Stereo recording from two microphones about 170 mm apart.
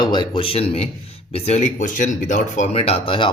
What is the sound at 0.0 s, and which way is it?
Speech, 25° left (ahead or behind).